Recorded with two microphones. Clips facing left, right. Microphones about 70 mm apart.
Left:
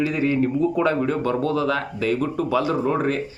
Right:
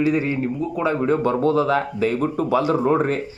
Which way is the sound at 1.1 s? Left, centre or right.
Right.